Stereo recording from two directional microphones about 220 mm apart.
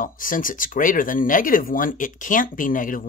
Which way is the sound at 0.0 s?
40° left (ahead or behind).